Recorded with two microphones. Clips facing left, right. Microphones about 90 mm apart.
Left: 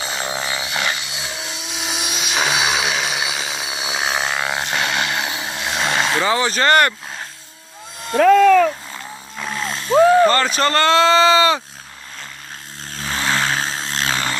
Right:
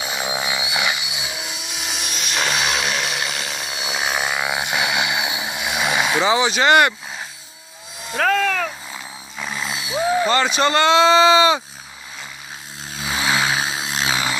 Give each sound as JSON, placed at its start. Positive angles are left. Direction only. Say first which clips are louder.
{"t": 0.0, "sound": "helicopter", "louder": "even", "side_deg": -10}
{"t": 8.9, "sound": "a sound", "louder": "left 2 dB", "side_deg": -5}
{"t": 10.1, "sound": "speech", "louder": "left 4 dB", "side_deg": -10}
{"t": 12.9, "sound": "vehicle", "louder": "even", "side_deg": -10}